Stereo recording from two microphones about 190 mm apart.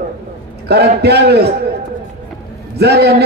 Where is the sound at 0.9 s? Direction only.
60° right (ahead or behind).